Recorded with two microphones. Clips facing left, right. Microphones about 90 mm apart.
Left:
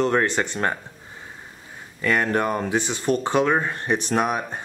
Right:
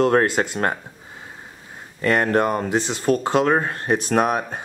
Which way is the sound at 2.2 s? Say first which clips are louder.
Right 3 dB; 10° right (ahead or behind).